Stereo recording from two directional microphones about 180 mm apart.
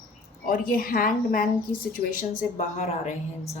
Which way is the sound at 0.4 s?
55° left (ahead or behind).